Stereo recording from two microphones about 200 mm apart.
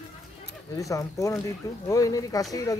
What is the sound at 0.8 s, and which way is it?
Speech, 15° left (ahead or behind).